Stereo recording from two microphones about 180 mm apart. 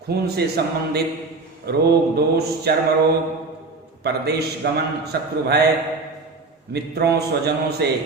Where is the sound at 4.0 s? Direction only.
65° right (ahead or behind).